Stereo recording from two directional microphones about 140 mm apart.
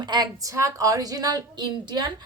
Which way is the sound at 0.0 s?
30° right (ahead or behind).